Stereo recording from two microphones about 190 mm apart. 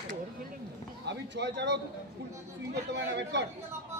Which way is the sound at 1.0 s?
65° right (ahead or behind).